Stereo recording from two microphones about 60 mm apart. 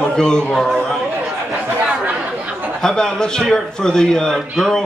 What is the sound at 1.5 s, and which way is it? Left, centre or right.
Chatter, right.